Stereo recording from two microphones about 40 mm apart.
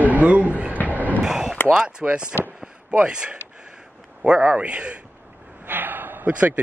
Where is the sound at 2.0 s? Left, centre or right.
Right.